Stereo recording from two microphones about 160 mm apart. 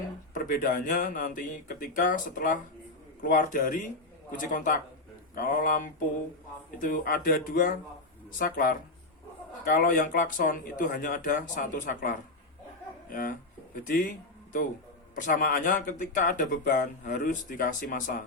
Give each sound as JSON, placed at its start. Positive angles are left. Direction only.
{"t": 0.3, "sound": "speech", "side_deg": 60}